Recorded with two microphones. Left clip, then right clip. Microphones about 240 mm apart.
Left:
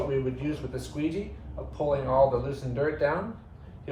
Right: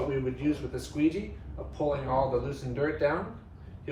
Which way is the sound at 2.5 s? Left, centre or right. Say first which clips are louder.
Left 2 dB; centre.